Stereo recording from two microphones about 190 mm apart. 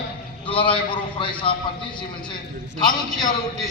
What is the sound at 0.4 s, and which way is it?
A man's voice, 25° left (ahead or behind).